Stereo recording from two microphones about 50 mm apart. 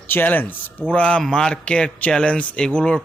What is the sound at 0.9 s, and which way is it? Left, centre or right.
A man's voice, left.